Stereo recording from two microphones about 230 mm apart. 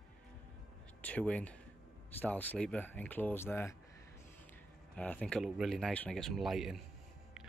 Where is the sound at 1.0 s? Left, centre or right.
Centre.